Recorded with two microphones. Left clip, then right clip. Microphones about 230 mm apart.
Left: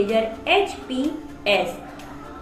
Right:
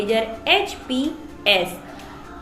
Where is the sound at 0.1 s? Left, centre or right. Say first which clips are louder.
Right 1 dB; right.